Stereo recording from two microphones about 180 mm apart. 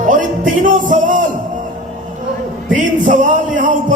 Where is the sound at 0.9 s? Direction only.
45° right (ahead or behind).